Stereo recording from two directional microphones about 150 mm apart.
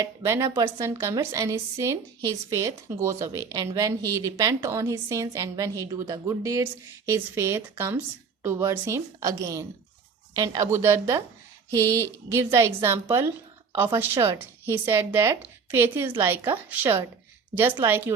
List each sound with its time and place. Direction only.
0.2 s a woman's voice: 20° right (ahead or behind)
12.3 s a woman's voice: 20° right (ahead or behind)